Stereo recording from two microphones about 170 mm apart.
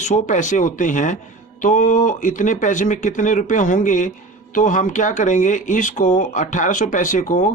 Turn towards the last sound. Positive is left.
turn(degrees=50)  # may be behind; listen again after turning